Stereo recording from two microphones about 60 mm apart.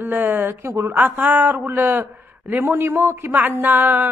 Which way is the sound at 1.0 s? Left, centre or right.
Right.